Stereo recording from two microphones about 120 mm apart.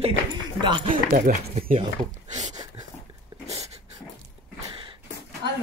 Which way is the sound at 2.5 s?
40° right (ahead or behind).